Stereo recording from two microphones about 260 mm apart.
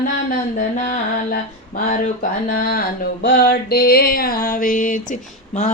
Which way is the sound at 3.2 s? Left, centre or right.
Left.